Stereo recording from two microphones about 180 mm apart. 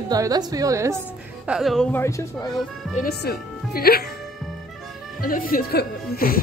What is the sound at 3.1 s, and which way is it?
Speech, 60° left (ahead or behind).